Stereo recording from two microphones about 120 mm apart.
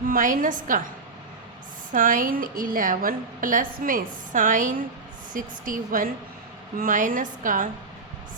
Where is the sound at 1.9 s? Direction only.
90° right.